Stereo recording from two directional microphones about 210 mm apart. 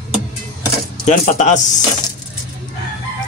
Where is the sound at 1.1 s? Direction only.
35° left (ahead or behind).